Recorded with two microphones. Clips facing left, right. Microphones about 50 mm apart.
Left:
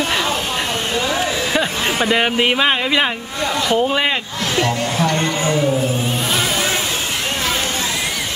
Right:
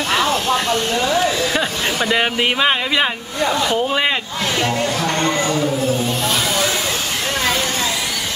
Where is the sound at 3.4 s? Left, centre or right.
Centre.